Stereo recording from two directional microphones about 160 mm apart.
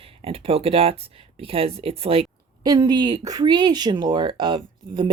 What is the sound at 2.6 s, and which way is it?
Speech, 25° right (ahead or behind).